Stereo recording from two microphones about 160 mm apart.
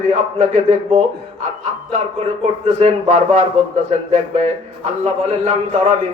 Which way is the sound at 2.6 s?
45° right (ahead or behind).